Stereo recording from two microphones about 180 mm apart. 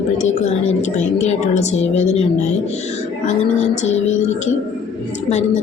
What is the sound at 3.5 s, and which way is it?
Speech, 40° left (ahead or behind).